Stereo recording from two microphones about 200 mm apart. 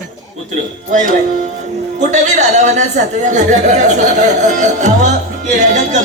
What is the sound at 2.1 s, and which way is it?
A man's voice, 35° right (ahead or behind).